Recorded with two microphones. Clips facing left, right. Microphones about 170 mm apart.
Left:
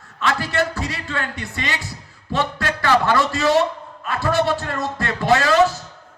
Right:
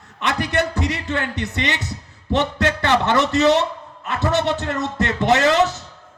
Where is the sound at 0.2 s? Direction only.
20° right (ahead or behind).